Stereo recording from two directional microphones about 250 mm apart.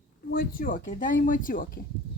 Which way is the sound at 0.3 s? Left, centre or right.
Left.